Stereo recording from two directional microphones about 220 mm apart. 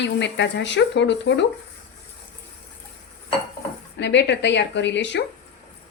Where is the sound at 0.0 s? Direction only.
50° left (ahead or behind).